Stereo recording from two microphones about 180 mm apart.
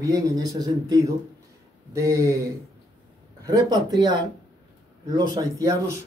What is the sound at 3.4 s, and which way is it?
Speech, 20° right (ahead or behind).